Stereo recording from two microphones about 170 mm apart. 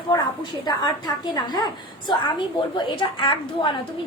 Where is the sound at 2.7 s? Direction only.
30° left (ahead or behind).